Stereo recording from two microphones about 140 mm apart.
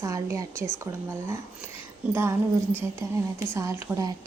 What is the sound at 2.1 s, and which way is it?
Speech, 20° right (ahead or behind).